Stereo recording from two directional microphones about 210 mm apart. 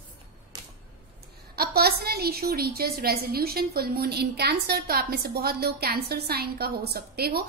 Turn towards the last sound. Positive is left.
turn(degrees=-50)  # may be behind; listen again after turning